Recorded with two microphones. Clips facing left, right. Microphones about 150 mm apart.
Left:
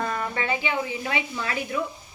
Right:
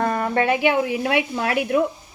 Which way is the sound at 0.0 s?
55° right (ahead or behind).